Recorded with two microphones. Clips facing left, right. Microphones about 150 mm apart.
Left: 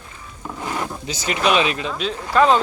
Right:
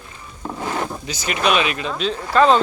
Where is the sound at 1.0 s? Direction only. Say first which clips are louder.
Left 2 dB; 25° left (ahead or behind).